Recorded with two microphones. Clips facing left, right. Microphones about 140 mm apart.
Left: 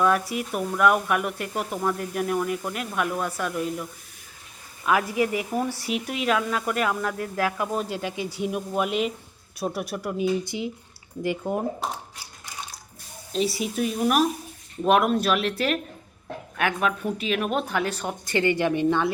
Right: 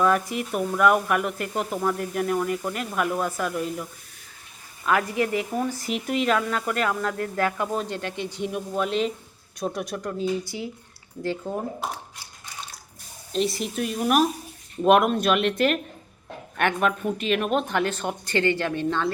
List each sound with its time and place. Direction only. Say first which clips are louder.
0.0 s speech: even; centre (ahead or behind)
4.9 s speech: even; 5° left (ahead or behind)
10.4 s speech: left 3 dB; 20° left (ahead or behind)
13.3 s speech: even; 5° left (ahead or behind)